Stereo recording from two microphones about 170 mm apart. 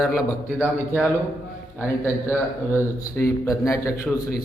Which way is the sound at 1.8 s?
15° left (ahead or behind).